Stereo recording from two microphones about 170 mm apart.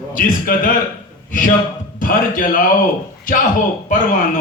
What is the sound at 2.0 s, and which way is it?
Speech, 55° left (ahead or behind).